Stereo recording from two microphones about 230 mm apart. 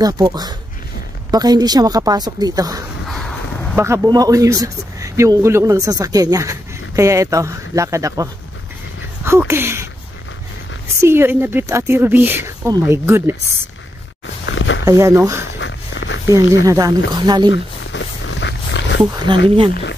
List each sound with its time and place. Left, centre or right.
0.0 s speech: centre
3.1 s a sound: centre
3.7 s speech: centre
11.0 s speech: centre
14.2 s a sound: left
14.9 s speech: centre
15.6 s a sound: left
16.3 s speech: centre
17.9 s roaring cats: left
19.2 s speech: right
19.7 s speech: left